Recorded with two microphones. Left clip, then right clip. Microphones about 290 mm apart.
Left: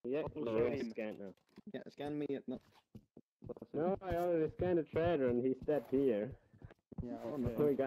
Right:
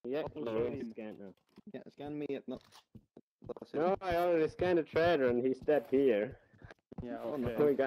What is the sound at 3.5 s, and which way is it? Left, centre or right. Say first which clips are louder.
Speech: right 5 dB; right.